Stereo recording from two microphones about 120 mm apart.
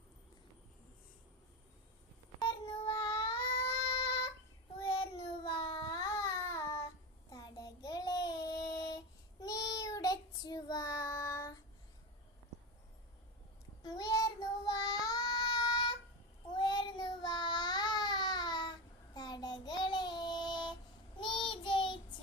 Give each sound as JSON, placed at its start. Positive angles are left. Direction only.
{"t": 2.4, "sound": "child singing", "side_deg": 50}
{"t": 4.8, "sound": "child singing", "side_deg": 50}
{"t": 6.1, "sound": "child singing", "side_deg": 25}
{"t": 13.8, "sound": "child singing", "side_deg": 35}